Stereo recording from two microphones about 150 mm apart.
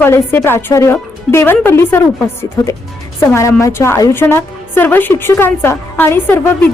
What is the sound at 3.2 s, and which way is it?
A woman's voice, 20° left (ahead or behind).